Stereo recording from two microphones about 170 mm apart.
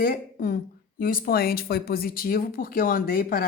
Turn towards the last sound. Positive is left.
turn(degrees=55)  # may be behind; listen again after turning